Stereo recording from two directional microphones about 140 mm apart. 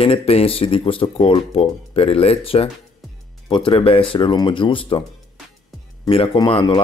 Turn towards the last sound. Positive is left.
turn(degrees=35)  # may be behind; listen again after turning